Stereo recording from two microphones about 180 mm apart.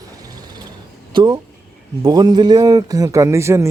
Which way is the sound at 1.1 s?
25° right (ahead or behind).